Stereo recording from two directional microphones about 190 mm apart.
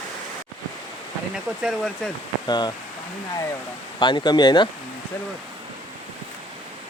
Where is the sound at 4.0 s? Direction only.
25° left (ahead or behind).